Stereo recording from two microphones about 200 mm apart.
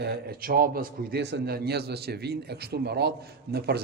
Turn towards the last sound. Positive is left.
turn(degrees=-55)  # may be behind; listen again after turning